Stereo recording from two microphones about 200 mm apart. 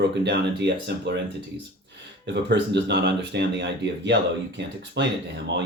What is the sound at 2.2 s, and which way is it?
Speech, 60° right (ahead or behind).